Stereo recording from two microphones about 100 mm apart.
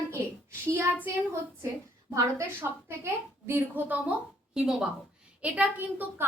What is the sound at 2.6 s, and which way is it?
A woman's voice, 25° right (ahead or behind).